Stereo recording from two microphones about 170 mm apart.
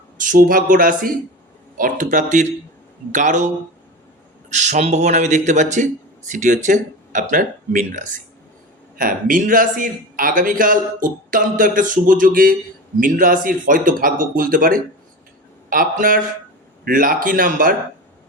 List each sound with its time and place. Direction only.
0.2 s a man's voice: 50° right (ahead or behind)